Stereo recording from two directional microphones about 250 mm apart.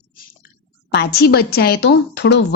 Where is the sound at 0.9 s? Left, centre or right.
Left.